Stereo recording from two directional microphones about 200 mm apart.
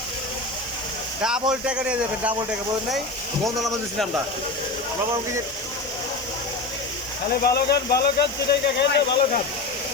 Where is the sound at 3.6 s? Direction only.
Centre (ahead or behind).